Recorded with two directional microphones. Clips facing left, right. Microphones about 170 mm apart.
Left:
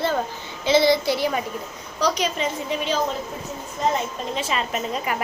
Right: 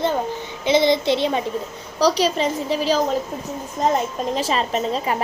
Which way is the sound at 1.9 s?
35° right (ahead or behind).